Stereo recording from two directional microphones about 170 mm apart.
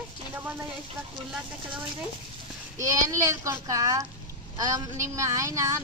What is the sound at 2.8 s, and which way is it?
A child's voice, 20° right (ahead or behind).